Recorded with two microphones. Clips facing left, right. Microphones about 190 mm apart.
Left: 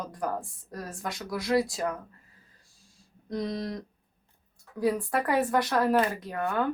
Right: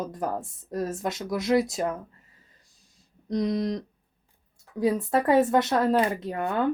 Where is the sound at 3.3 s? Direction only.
20° right (ahead or behind).